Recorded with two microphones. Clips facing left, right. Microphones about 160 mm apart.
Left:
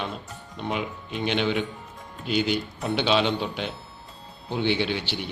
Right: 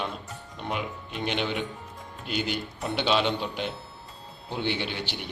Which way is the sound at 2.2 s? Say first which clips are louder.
Left 6 dB; 50° right (ahead or behind).